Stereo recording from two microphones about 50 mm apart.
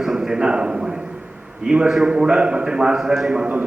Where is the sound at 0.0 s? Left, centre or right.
Centre.